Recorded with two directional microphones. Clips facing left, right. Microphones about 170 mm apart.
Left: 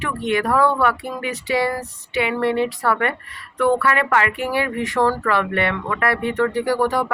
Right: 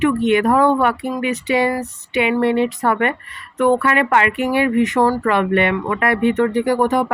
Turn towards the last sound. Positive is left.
turn(degrees=-20)  # may be behind; listen again after turning